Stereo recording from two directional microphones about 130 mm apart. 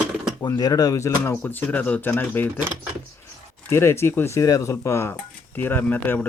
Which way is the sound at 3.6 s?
20° left (ahead or behind).